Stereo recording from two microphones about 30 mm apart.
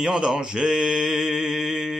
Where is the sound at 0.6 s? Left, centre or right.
Centre.